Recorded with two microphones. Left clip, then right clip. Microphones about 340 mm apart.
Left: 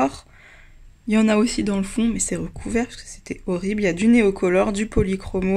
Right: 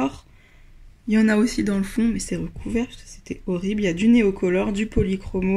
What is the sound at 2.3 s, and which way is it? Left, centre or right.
Speech, left.